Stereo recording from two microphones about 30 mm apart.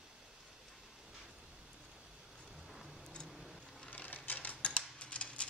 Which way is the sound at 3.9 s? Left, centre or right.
Left.